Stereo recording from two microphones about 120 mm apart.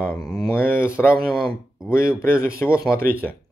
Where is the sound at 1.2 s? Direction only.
Centre (ahead or behind).